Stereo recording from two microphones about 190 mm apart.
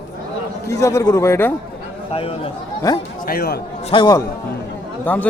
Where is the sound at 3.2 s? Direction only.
55° left (ahead or behind).